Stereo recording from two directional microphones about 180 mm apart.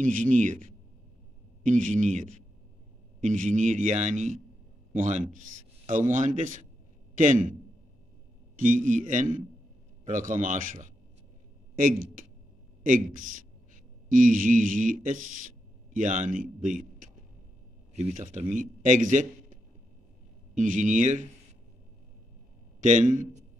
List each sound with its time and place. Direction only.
0.0 s a man's voice: 45° right (ahead or behind)
8.5 s a man's voice: 45° right (ahead or behind)
17.9 s a man's voice: 40° right (ahead or behind)
22.8 s a man's voice: 45° right (ahead or behind)